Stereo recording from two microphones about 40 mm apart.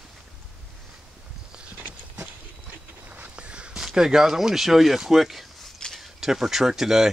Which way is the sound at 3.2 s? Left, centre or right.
Right.